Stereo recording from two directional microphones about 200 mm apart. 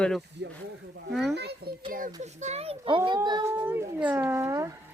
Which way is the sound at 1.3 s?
55° right (ahead or behind).